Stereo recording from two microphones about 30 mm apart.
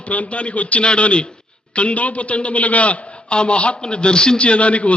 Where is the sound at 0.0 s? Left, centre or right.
Left.